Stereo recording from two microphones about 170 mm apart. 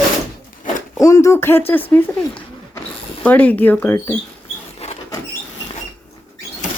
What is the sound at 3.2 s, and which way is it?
Speech, 10° left (ahead or behind).